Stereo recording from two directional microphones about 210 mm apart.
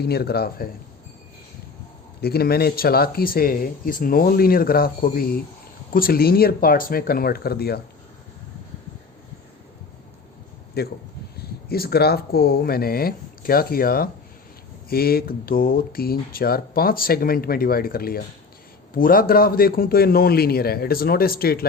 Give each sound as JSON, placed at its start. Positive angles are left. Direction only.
{"t": 0.0, "sound": "speech", "side_deg": 50}
{"t": 2.2, "sound": "speech", "side_deg": 45}
{"t": 10.8, "sound": "speech", "side_deg": 50}